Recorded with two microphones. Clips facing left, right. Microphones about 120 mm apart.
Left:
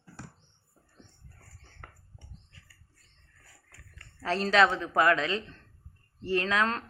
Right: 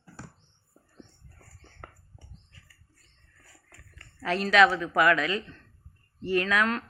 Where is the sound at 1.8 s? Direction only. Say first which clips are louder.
Right 4 dB; 25° right (ahead or behind).